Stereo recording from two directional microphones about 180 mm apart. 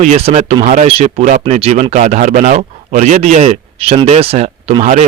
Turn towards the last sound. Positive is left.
turn(degrees=-40)  # may be behind; listen again after turning